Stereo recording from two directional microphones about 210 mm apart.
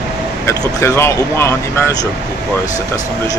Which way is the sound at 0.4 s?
15° left (ahead or behind).